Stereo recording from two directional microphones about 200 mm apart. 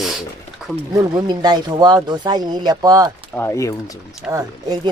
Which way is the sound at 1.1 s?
20° right (ahead or behind).